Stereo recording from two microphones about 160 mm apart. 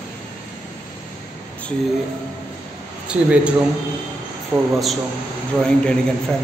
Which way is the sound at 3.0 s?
5° right (ahead or behind).